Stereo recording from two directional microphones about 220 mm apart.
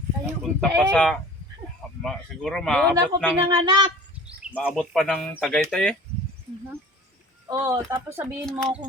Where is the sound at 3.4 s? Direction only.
20° right (ahead or behind).